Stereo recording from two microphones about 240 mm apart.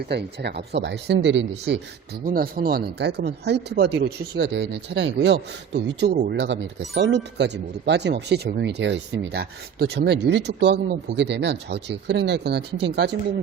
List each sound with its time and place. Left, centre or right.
0.1 s speech: right